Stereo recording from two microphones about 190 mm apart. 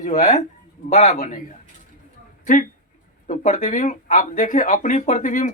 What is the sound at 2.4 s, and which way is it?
Speech, 45° left (ahead or behind).